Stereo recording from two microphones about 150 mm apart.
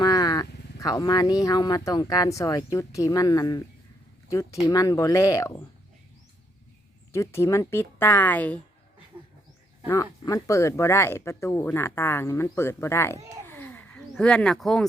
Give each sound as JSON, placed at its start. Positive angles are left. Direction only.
{"t": 0.0, "sound": "speech", "side_deg": 25}
{"t": 7.1, "sound": "speech", "side_deg": 20}
{"t": 9.1, "sound": "goat", "side_deg": -10}
{"t": 9.8, "sound": "speech", "side_deg": 20}
{"t": 13.5, "sound": "a sound", "side_deg": 10}